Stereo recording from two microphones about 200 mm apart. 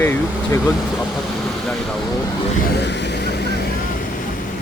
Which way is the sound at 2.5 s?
50° left (ahead or behind).